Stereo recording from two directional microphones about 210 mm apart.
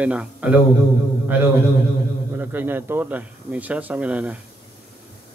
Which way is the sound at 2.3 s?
10° right (ahead or behind).